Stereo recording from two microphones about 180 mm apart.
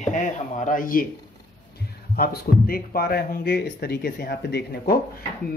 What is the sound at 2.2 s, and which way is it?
Speech, 55° left (ahead or behind).